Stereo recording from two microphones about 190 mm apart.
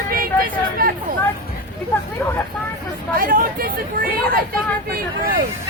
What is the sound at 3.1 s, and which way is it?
Speech, 50° right (ahead or behind).